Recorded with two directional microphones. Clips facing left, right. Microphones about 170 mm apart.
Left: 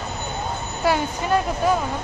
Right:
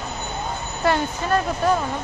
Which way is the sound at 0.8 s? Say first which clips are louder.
Even; 10° left (ahead or behind).